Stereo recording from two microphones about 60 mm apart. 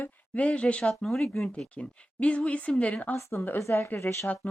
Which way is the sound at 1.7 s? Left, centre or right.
Left.